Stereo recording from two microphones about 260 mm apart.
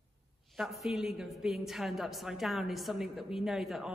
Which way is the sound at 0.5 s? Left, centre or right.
Centre.